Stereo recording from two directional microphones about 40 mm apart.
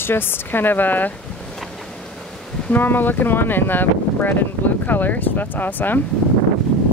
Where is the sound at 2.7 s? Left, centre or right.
Left.